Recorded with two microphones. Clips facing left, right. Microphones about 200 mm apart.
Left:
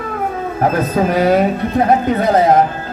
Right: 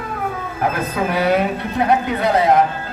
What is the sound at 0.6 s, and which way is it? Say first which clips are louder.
A man's voice: left 5 dB; 40° left (ahead or behind).